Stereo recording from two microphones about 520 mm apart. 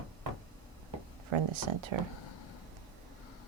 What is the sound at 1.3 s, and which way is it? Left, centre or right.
Speech, right.